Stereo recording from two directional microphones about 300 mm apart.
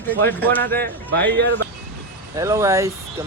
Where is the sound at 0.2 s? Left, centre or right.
Centre.